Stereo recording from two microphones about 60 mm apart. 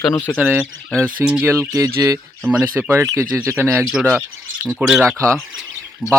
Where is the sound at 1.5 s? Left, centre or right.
Right.